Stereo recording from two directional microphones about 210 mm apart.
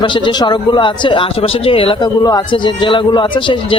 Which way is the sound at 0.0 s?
20° left (ahead or behind).